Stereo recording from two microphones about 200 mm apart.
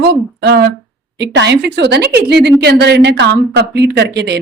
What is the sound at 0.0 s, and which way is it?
A woman's voice, 60° right (ahead or behind).